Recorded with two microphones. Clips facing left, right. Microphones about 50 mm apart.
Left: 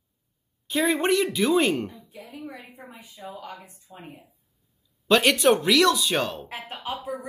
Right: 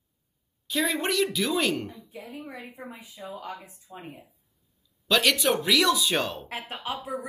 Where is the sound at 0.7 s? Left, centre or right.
Left.